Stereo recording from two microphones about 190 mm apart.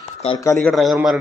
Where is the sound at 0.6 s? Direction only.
Centre (ahead or behind).